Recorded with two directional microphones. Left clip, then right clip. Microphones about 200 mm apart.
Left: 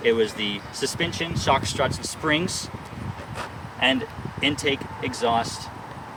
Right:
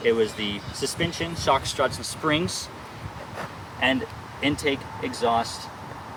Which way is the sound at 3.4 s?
10° left (ahead or behind).